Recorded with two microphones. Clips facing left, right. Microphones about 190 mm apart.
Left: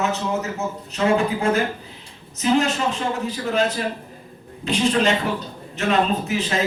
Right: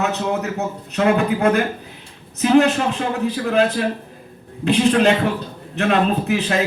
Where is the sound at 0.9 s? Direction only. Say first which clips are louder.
Right 3 dB; 60° right (ahead or behind).